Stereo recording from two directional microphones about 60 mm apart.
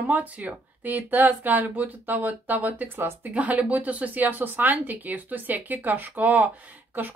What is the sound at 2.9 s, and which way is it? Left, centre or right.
Speech, right.